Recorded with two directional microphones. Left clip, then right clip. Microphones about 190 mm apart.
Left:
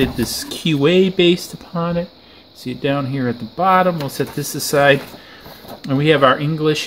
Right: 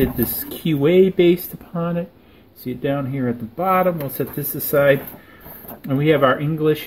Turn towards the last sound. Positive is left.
turn(degrees=15)  # may be behind; listen again after turning